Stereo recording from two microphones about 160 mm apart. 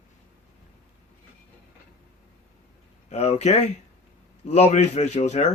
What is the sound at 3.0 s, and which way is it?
Speech, 40° left (ahead or behind).